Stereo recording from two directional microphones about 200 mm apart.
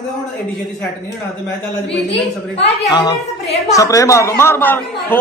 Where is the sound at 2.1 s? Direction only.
30° left (ahead or behind).